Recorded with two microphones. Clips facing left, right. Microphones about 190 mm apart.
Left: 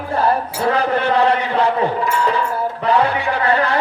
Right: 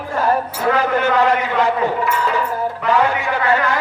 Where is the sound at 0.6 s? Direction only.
35° left (ahead or behind).